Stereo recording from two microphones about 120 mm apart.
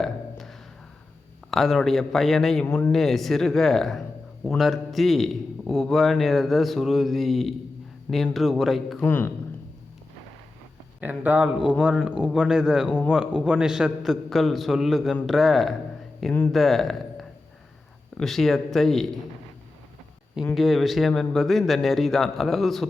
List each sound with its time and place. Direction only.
0.0 s a sound: 5° left (ahead or behind)
1.5 s a man's voice: centre (ahead or behind)
9.0 s a man's voice: 15° left (ahead or behind)
11.0 s a man's voice: 15° right (ahead or behind); by 19.2 s 5° left (ahead or behind)
20.6 s a man's voice: centre (ahead or behind)